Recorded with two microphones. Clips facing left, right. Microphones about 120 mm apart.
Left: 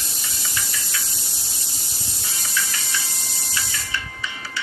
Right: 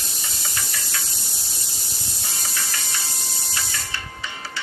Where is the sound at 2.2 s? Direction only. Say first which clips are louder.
Left 3 dB; 40° right (ahead or behind).